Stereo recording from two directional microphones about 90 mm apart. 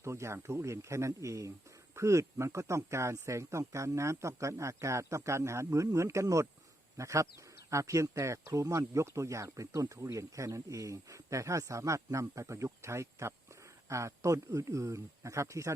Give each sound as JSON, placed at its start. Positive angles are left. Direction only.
{"t": 0.0, "sound": "speech", "side_deg": -30}